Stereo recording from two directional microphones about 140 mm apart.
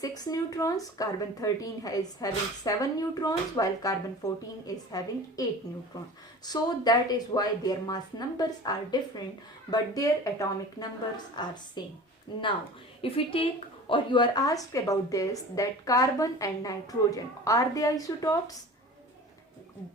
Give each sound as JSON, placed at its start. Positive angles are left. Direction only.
{"t": 0.0, "sound": "a woman's voice", "side_deg": 25}
{"t": 13.0, "sound": "a woman's voice", "side_deg": 40}